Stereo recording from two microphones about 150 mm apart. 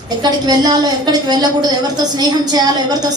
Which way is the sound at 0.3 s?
25° right (ahead or behind).